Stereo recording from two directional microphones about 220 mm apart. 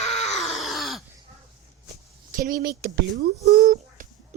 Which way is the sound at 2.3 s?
40° right (ahead or behind).